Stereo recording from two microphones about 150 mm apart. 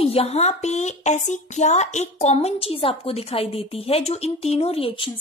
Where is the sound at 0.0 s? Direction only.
40° left (ahead or behind).